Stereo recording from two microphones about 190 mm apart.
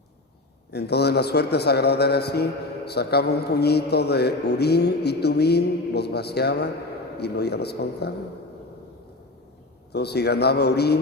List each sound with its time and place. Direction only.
0.7 s a man's voice: 60° left (ahead or behind)
9.9 s a man's voice: 60° left (ahead or behind)